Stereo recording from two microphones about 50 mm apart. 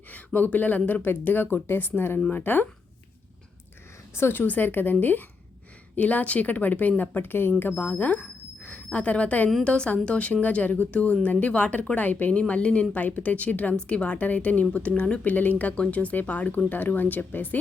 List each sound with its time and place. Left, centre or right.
0.3 s speech: left
4.1 s speech: left
4.4 s speech: left
7.7 s a woman's voice: left